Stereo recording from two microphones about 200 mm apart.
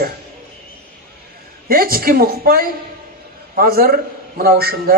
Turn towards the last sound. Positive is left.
turn(degrees=-50)  # may be behind; listen again after turning